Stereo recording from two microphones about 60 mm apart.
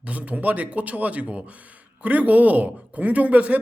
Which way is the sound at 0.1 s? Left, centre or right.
Right.